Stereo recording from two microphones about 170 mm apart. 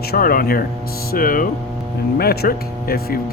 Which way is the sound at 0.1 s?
60° left (ahead or behind).